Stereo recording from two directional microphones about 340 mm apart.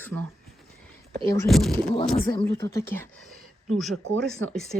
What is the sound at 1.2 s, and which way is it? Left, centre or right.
Speech, centre.